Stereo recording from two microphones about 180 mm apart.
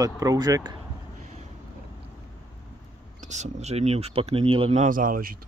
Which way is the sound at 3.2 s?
40° right (ahead or behind).